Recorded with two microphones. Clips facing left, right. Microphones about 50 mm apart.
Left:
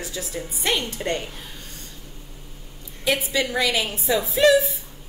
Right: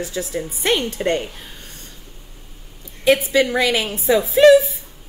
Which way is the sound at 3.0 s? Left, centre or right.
Right.